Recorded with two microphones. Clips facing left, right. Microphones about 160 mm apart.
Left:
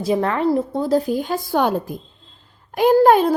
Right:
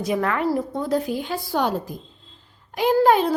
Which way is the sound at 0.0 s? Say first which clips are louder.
Left 4 dB; 30° left (ahead or behind).